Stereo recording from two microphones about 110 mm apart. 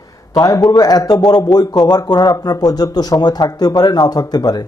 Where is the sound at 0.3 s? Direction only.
35° left (ahead or behind).